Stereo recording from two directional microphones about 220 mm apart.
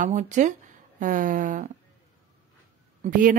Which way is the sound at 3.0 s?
40° right (ahead or behind).